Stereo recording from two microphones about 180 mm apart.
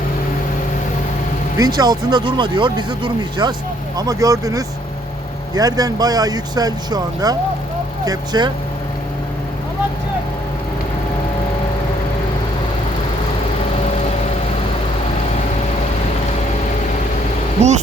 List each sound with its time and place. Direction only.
1.5 s speech: 20° right (ahead or behind)